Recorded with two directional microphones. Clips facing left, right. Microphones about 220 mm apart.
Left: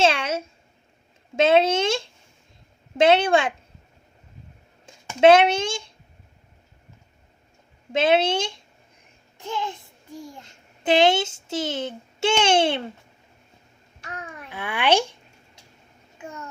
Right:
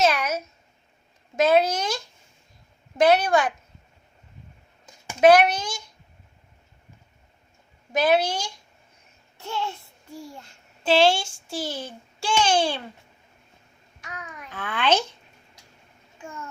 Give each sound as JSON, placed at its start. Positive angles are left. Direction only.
{"t": 0.0, "sound": "a sound", "side_deg": 30}
{"t": 1.4, "sound": "a child's voice", "side_deg": 25}
{"t": 5.2, "sound": "a child's voice", "side_deg": 25}
{"t": 7.9, "sound": "a child's voice", "side_deg": 25}
{"t": 10.8, "sound": "a child's voice", "side_deg": 20}
{"t": 14.0, "sound": "babbling", "side_deg": 30}
{"t": 14.5, "sound": "a child's voice", "side_deg": 15}